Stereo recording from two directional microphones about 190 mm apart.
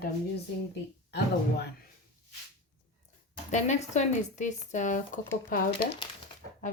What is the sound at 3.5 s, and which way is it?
Speech, 40° left (ahead or behind).